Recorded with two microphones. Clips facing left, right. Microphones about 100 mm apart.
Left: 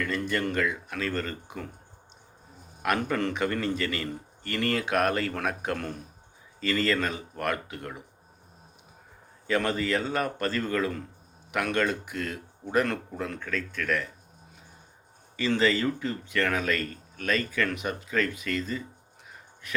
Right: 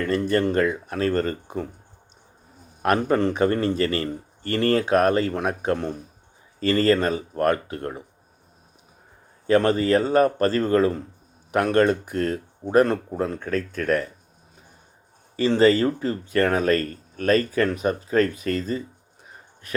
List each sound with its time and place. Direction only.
0.0 s speech: 35° right (ahead or behind)
2.8 s a man's voice: 35° right (ahead or behind)
6.6 s speech: 40° right (ahead or behind)
9.5 s speech: 40° right (ahead or behind)
15.4 s speech: 40° right (ahead or behind)